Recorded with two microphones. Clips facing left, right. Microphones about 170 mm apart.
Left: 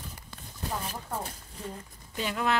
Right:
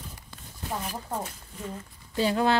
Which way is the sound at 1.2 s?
35° left (ahead or behind).